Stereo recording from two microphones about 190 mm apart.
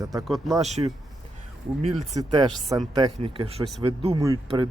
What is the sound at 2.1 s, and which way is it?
Speech, 20° right (ahead or behind).